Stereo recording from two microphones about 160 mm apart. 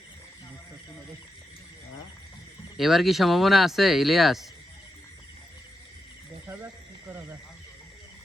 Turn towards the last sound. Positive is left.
turn(degrees=-15)  # may be behind; listen again after turning